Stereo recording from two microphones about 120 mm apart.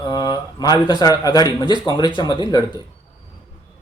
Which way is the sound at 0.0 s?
35° left (ahead or behind).